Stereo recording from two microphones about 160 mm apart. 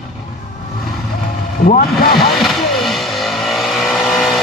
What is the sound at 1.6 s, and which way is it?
Speech, 85° left.